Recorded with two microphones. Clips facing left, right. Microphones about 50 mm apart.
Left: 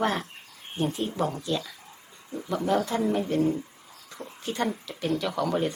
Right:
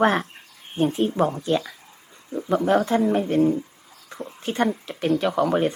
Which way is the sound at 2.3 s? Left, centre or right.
Right.